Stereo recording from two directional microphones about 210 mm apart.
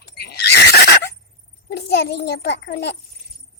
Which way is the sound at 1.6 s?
50° left (ahead or behind).